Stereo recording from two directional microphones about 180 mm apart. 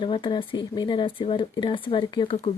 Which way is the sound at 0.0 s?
25° left (ahead or behind).